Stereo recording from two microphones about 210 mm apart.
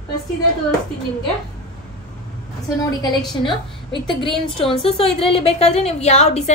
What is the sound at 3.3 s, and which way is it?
A woman's voice, 20° left (ahead or behind).